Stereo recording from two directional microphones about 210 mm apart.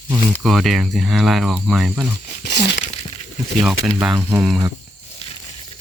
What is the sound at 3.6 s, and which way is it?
Speech, 5° right (ahead or behind).